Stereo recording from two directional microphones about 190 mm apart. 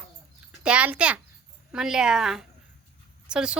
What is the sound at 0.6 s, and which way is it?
A woman's voice, 5° right (ahead or behind).